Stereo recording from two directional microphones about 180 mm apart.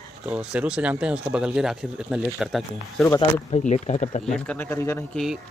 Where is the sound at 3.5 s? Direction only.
40° left (ahead or behind).